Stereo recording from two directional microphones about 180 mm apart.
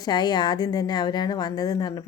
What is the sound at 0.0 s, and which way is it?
A woman's voice, 25° left (ahead or behind).